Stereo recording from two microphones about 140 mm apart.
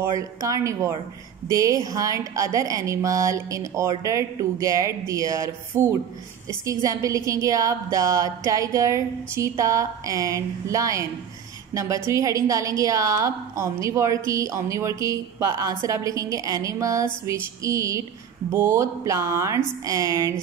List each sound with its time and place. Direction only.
0.0 s a woman's voice: 20° right (ahead or behind)